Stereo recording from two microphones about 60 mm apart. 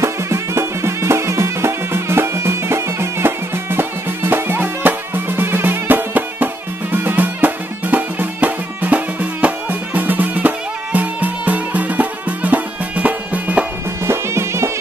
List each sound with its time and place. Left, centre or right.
0.0 s music: right
14.0 s music: right